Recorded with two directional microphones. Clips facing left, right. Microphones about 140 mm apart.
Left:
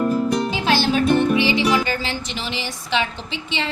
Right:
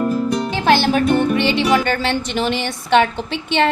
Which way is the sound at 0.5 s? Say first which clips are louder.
Right 4 dB; 55° right (ahead or behind).